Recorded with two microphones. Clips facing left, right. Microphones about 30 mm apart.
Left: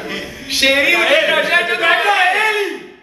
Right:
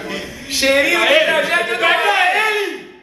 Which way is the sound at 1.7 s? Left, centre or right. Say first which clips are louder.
Right 1 dB; centre.